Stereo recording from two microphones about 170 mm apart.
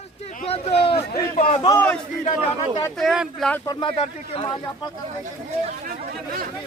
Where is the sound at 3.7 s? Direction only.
25° left (ahead or behind).